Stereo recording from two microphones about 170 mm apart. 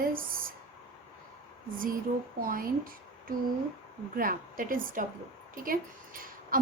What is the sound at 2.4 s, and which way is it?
A woman's voice, 55° right (ahead or behind).